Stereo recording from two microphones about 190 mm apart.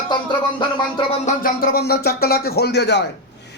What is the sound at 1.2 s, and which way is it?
Speech, 50° left (ahead or behind).